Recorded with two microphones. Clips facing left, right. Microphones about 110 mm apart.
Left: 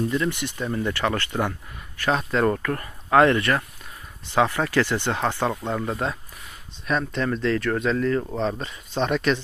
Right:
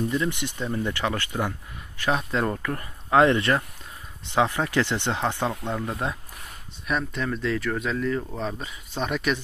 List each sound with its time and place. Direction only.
0.1 s speech: 15° right (ahead or behind)
3.3 s speech: 25° right (ahead or behind)
5.5 s speech: 15° left (ahead or behind)
6.9 s speech: 5° right (ahead or behind)